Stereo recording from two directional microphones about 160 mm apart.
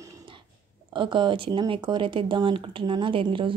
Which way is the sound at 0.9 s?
30° right (ahead or behind).